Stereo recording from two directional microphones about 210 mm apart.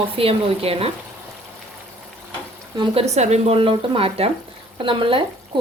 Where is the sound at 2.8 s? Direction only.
30° right (ahead or behind).